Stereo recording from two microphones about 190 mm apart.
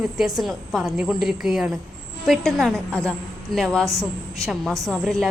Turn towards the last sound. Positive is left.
turn(degrees=0)  # may be behind; listen again after turning